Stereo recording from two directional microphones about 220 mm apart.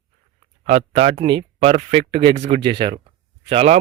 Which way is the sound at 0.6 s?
30° right (ahead or behind).